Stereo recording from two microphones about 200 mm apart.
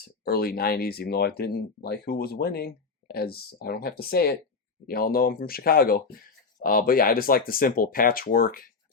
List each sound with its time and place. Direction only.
0.3 s speech: 50° left (ahead or behind)